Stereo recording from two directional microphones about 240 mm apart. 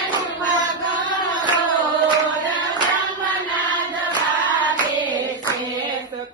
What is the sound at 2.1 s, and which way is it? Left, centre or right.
Music, centre.